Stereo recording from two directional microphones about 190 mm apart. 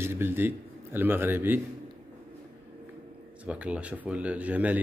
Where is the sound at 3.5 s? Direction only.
5° right (ahead or behind).